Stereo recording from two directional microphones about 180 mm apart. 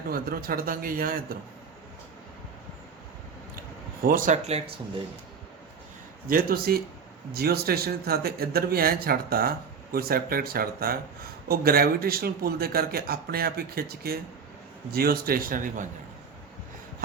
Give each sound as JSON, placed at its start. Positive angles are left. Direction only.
{"t": 0.1, "sound": "a man's voice", "side_deg": -55}
{"t": 4.0, "sound": "a man's voice", "side_deg": -50}
{"t": 4.4, "sound": "speech", "side_deg": -35}
{"t": 6.2, "sound": "a man's voice", "side_deg": -55}